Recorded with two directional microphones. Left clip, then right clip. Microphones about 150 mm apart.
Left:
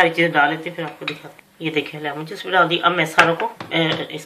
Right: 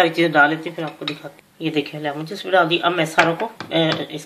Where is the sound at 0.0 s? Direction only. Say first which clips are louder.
Right 1 dB; 55° right (ahead or behind).